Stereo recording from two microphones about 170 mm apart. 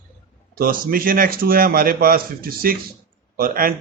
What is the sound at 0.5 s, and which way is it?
Speech, 60° right (ahead or behind).